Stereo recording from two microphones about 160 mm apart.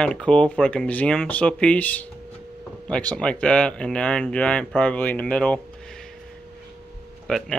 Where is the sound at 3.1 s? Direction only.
5° left (ahead or behind).